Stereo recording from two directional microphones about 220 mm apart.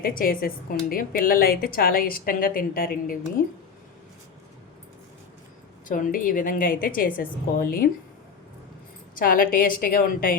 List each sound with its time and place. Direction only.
0.0 s a woman's voice: 40° left (ahead or behind)
5.9 s a woman's voice: 40° left (ahead or behind)
9.1 s a woman's voice: 40° left (ahead or behind)